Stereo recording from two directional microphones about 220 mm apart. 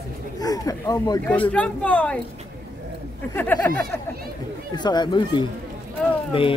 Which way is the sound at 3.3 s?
10° left (ahead or behind).